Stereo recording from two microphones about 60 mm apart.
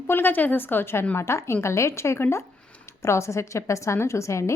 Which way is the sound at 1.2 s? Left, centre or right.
Left.